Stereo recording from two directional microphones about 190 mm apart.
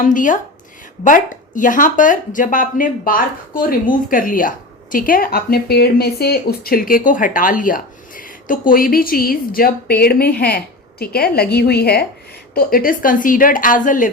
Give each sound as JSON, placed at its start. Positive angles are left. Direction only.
{"t": 0.0, "sound": "a woman's voice", "side_deg": 45}